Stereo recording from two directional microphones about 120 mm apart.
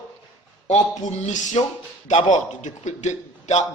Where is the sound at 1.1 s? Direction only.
75° left (ahead or behind).